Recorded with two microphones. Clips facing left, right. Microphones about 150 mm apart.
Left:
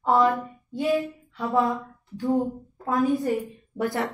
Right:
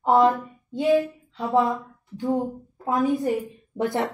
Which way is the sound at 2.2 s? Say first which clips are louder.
Left 1 dB; 20° right (ahead or behind).